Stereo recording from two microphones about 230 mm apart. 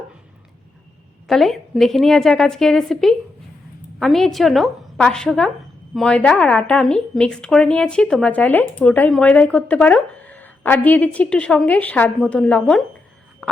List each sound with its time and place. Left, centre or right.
1.3 s a woman's voice: centre